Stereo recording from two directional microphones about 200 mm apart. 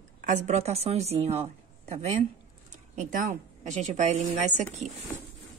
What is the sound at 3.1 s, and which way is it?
A woman's voice, 35° right (ahead or behind).